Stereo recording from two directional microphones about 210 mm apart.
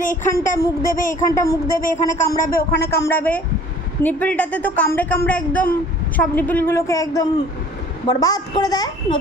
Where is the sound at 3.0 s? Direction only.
10° left (ahead or behind).